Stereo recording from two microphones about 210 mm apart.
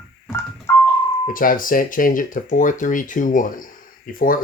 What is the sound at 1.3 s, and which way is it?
Speech, 40° left (ahead or behind).